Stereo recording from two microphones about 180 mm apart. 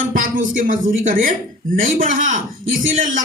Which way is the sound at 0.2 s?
45° right (ahead or behind).